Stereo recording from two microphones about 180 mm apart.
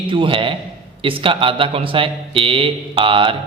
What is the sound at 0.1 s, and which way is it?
A man's voice, 30° right (ahead or behind).